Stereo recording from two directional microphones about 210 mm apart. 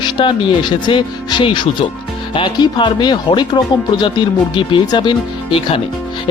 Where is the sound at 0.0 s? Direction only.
25° left (ahead or behind).